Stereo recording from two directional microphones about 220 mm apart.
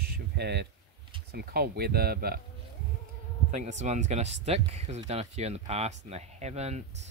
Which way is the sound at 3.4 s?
35° right (ahead or behind).